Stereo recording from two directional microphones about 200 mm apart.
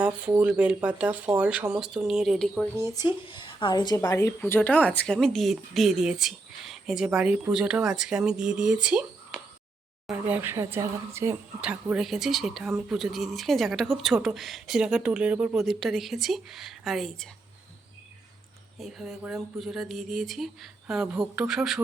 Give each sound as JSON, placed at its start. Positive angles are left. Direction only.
{"t": 0.0, "sound": "speech", "side_deg": -5}
{"t": 2.7, "sound": "speech", "side_deg": 15}
{"t": 18.8, "sound": "speech", "side_deg": -5}